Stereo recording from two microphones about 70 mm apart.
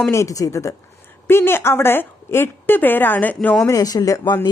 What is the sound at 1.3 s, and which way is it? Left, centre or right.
Speech, left.